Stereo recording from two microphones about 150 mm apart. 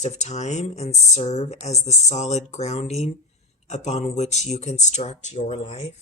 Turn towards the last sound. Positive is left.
turn(degrees=50)  # may be behind; listen again after turning